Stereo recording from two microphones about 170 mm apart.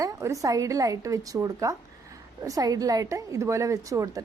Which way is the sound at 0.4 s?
20° right (ahead or behind).